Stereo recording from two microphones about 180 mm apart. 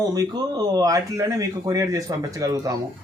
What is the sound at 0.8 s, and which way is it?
A man's voice, 20° right (ahead or behind).